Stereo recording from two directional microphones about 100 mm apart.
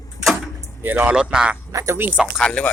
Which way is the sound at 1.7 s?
30° right (ahead or behind).